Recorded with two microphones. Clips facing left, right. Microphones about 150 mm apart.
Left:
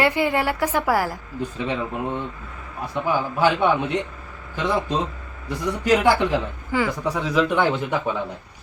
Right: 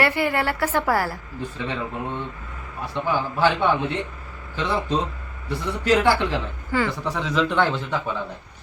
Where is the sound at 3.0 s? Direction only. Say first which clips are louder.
Left 1 dB; 10° left (ahead or behind).